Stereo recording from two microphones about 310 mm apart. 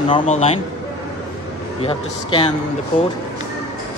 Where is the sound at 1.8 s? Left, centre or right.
Centre.